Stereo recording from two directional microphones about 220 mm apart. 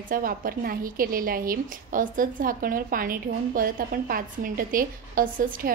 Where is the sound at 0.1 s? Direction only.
40° right (ahead or behind).